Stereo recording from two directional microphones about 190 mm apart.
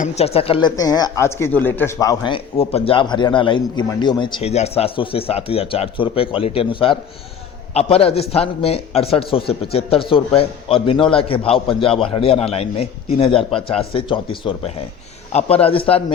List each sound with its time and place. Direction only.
0.0 s a man's voice: 35° left (ahead or behind)